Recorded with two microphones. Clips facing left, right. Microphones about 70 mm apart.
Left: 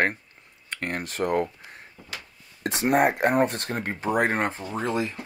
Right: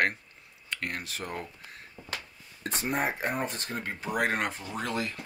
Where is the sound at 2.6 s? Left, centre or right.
Left.